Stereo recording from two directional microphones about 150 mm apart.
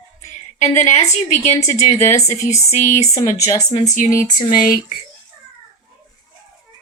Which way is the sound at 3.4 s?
25° left (ahead or behind).